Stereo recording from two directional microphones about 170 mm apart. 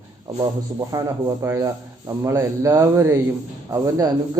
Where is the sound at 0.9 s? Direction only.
20° right (ahead or behind).